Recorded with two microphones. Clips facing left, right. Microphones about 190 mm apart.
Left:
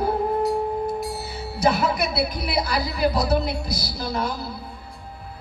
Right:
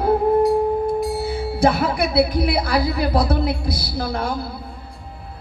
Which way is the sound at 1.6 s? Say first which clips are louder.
Right 3 dB; 55° right (ahead or behind).